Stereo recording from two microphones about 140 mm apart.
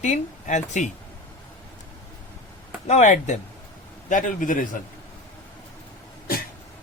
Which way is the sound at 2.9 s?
55° left (ahead or behind).